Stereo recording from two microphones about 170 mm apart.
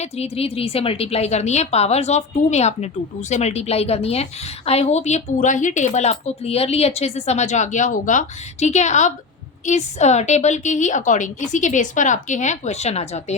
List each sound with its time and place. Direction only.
0.0 s a woman's voice: 35° left (ahead or behind)